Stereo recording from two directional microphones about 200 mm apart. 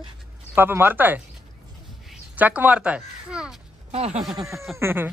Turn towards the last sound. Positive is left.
turn(degrees=-10)  # may be behind; listen again after turning